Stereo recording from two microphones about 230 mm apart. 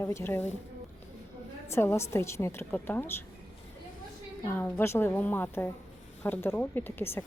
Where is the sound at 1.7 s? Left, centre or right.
Centre.